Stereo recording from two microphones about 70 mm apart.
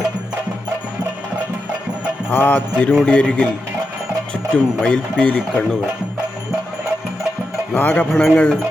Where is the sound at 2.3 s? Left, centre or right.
Left.